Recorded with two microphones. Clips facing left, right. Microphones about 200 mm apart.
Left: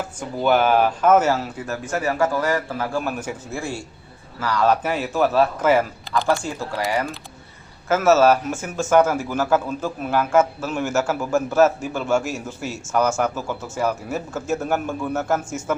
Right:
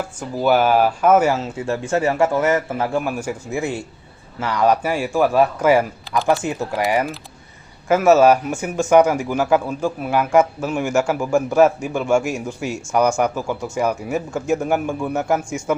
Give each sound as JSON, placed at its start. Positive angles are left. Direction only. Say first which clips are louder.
{"t": 0.2, "sound": "speech", "louder": "right 2 dB", "side_deg": -5}
{"t": 3.0, "sound": "a man's voice", "louder": "right 3 dB", "side_deg": -10}
{"t": 3.6, "sound": "a man's voice", "louder": "right 5 dB", "side_deg": -20}